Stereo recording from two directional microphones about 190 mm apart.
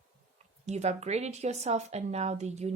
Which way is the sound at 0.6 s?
35° right (ahead or behind).